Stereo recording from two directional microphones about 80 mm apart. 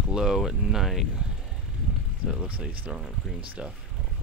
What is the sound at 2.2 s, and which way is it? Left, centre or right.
Speech, centre.